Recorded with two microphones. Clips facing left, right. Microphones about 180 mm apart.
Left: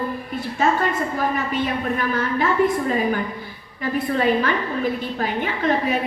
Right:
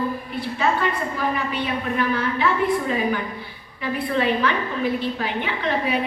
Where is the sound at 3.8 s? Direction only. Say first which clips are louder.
Left 1 dB; 45° left (ahead or behind).